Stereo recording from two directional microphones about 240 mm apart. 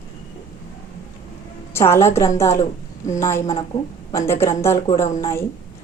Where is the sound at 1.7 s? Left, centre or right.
Centre.